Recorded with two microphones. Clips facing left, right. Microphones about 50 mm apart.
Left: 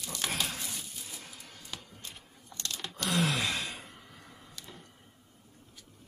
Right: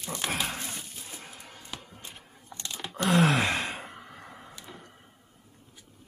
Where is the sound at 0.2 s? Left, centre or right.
Centre.